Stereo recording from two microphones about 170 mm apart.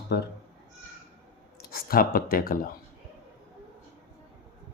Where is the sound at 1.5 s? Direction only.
60° left (ahead or behind).